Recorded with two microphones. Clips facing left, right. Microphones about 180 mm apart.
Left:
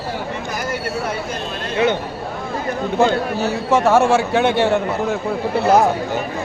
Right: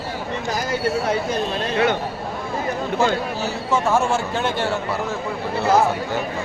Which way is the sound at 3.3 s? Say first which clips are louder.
Left 5 dB; 65° left (ahead or behind).